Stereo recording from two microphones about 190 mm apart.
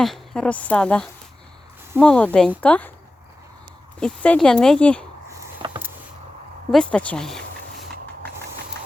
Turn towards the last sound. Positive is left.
turn(degrees=5)  # may be behind; listen again after turning